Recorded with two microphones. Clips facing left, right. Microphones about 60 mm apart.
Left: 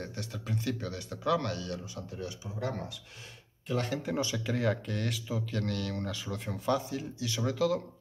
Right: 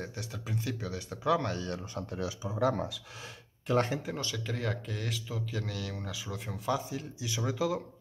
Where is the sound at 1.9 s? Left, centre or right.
Right.